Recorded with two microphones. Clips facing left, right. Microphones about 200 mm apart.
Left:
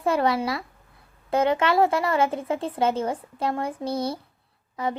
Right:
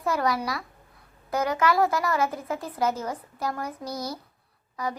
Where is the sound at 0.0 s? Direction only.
30° left (ahead or behind).